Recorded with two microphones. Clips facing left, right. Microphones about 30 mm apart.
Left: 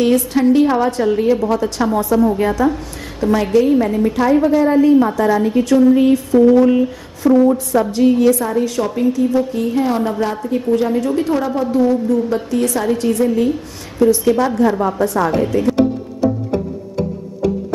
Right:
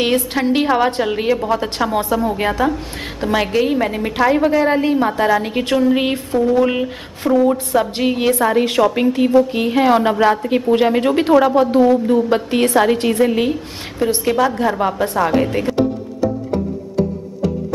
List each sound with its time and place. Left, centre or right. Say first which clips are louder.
0.0 s a woman's voice: left 3 dB; right
7.2 s a woman's voice: left 2 dB; right
14.8 s a woman's voice: left 1 dB; right
15.2 s speech: right 1 dB; right